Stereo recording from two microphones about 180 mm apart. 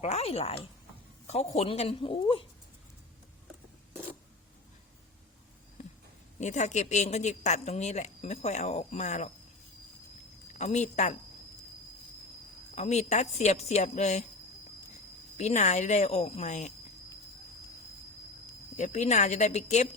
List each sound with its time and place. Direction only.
0.0 s a woman's voice: 35° left (ahead or behind)
1.5 s a woman's voice: 35° left (ahead or behind)
6.4 s a woman's voice: 40° left (ahead or behind)
10.5 s a woman's voice: 40° left (ahead or behind)
12.7 s a woman's voice: 40° left (ahead or behind)
15.4 s a woman's voice: 40° left (ahead or behind)
18.8 s a woman's voice: 40° left (ahead or behind)